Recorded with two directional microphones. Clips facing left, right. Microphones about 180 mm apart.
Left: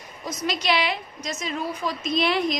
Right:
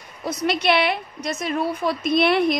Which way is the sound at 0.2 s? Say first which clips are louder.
Right 5 dB; 60° right (ahead or behind).